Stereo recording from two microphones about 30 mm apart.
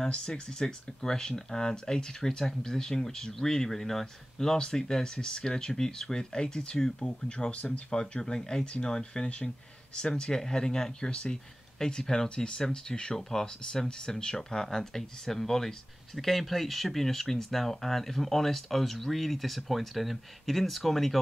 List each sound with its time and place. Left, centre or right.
0.1 s speech: left
7.5 s speech: left
8.2 s speech: left
11.8 s speech: centre